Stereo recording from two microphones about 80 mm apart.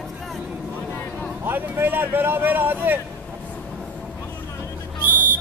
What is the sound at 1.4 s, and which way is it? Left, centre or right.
Speech, right.